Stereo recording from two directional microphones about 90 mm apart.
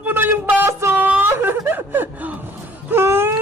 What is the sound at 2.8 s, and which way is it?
Wail, 25° right (ahead or behind).